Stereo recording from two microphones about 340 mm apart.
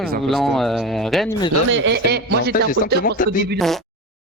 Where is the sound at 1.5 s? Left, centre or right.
Right.